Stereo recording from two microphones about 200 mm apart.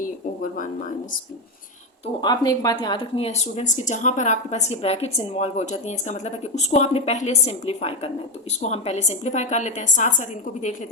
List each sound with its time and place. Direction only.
2.2 s speech: 20° left (ahead or behind); by 10.8 s 40° left (ahead or behind)